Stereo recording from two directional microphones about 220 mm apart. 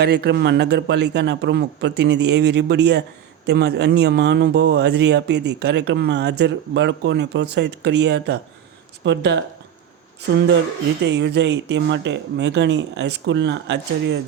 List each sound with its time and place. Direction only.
0.0 s speech: 45° right (ahead or behind)
11.0 s speech: 50° right (ahead or behind)